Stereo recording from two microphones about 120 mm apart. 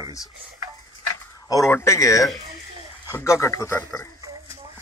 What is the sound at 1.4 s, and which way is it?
Speech, 25° left (ahead or behind).